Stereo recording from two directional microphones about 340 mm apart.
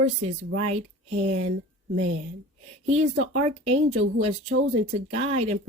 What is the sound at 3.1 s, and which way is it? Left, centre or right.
Speech, right.